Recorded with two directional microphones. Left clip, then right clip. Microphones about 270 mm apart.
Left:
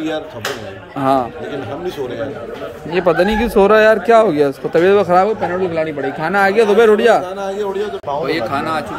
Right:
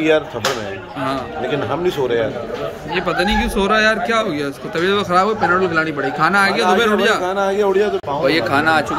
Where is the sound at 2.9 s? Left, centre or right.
Centre.